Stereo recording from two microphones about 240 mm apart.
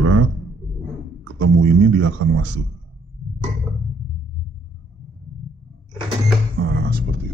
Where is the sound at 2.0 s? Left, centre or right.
Right.